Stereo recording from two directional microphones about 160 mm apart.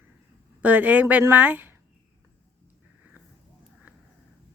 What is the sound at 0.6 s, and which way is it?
Speech, 10° right (ahead or behind).